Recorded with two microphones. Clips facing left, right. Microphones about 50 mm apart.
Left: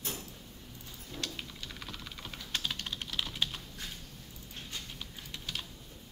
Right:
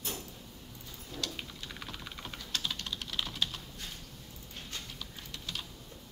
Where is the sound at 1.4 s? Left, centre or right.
Centre.